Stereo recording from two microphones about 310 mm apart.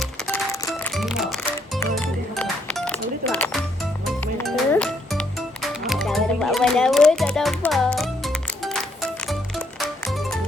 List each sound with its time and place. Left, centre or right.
0.3 s music: centre